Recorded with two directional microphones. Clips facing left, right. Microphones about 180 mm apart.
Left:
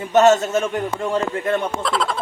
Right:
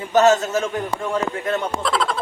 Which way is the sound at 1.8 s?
Centre (ahead or behind).